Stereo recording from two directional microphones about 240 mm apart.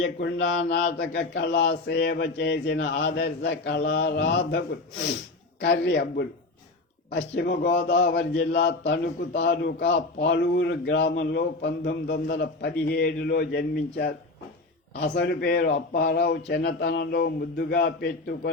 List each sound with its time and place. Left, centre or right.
0.0 s a man's voice: left